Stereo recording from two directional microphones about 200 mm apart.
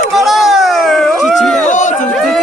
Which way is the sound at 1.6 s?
40° left (ahead or behind).